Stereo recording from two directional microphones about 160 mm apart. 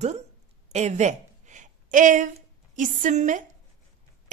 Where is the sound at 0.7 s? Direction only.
45° right (ahead or behind).